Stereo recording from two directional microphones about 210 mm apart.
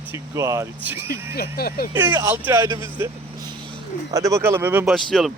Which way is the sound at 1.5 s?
45° left (ahead or behind).